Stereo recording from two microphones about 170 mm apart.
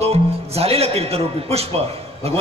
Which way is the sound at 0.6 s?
35° right (ahead or behind).